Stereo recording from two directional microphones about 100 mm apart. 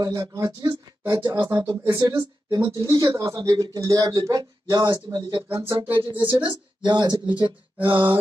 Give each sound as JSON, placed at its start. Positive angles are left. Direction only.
{"t": 0.0, "sound": "speech", "side_deg": -40}